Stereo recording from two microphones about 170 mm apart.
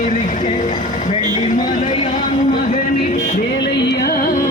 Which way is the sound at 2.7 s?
45° left (ahead or behind).